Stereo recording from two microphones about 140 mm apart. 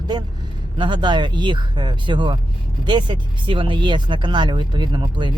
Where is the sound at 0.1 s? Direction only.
30° right (ahead or behind).